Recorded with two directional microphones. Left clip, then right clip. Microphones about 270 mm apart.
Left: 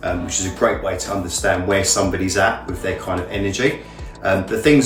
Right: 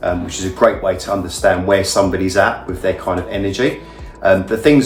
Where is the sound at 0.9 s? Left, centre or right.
Centre.